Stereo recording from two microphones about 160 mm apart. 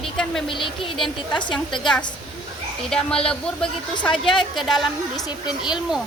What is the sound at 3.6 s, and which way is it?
Speech, 30° left (ahead or behind).